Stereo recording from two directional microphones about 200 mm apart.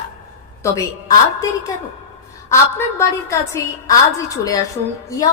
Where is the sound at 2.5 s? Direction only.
15° left (ahead or behind).